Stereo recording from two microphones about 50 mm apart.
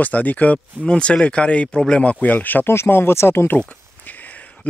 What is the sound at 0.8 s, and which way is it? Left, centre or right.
Speech, centre.